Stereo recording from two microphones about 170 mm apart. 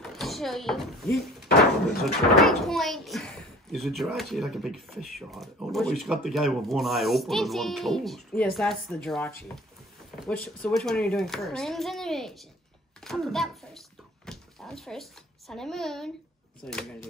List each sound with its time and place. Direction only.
0.0 s a child's voice: centre (ahead or behind)
13.0 s a sound: centre (ahead or behind)
16.6 s speech: 5° left (ahead or behind)